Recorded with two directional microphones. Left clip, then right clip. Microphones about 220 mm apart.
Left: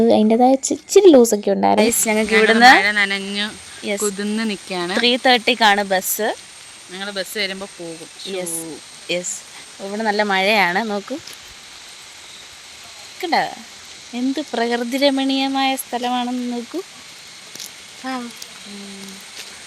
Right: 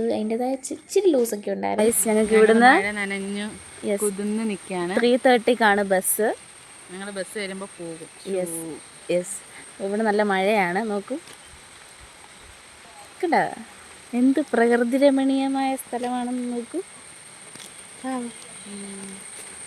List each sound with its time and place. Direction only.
0.0 s speech: 40° left (ahead or behind)
1.8 s a woman's voice: 5° right (ahead or behind)
4.0 s a woman's voice: 5° left (ahead or behind)
4.9 s speech: 15° right (ahead or behind)
6.9 s speech: 15° left (ahead or behind)
9.0 s speech: 20° right (ahead or behind); by 10.8 s centre (ahead or behind)
13.2 s speech: 20° right (ahead or behind); by 16.3 s 5° left (ahead or behind)